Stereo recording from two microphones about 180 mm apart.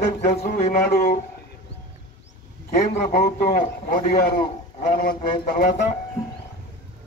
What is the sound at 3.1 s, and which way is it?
A man's voice, 60° left (ahead or behind).